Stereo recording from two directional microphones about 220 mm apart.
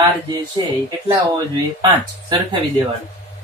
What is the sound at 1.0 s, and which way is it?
Speech, 20° right (ahead or behind).